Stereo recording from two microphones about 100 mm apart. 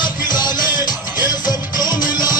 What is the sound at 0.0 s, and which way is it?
Music, 45° left (ahead or behind).